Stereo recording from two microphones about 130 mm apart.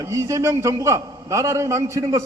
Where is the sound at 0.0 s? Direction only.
20° right (ahead or behind).